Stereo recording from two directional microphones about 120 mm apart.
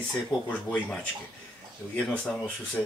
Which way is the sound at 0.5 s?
10° left (ahead or behind).